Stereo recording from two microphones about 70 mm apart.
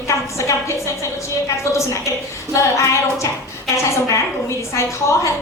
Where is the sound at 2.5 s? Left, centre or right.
Left.